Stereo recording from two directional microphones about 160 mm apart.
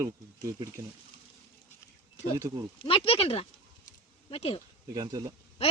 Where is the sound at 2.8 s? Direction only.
35° left (ahead or behind).